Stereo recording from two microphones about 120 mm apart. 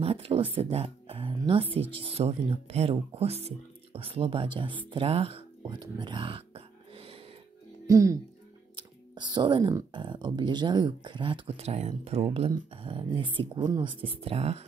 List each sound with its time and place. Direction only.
0.0 s speech: 55° right (ahead or behind)
5.0 s speech: 55° right (ahead or behind)
5.7 s a sound: 40° right (ahead or behind)
7.8 s speech: 25° right (ahead or behind)
8.7 s clicking: 40° right (ahead or behind)
9.9 s speech: 40° right (ahead or behind)
14.0 s speech: 50° right (ahead or behind)